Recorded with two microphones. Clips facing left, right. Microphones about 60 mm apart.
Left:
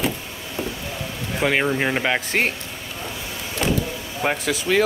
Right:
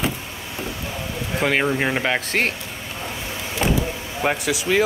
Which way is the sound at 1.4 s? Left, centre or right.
Centre.